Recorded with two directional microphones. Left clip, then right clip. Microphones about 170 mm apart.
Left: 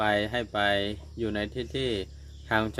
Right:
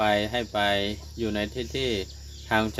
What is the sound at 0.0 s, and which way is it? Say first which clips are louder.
Speech: right 2 dB; 15° left (ahead or behind).